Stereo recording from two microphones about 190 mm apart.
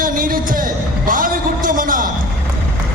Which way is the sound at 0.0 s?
45° right (ahead or behind).